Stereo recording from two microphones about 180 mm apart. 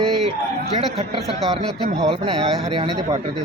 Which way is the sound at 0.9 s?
35° right (ahead or behind).